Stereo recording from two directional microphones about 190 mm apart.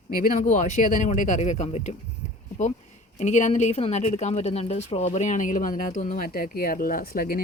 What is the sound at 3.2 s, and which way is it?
A woman's voice, 40° left (ahead or behind).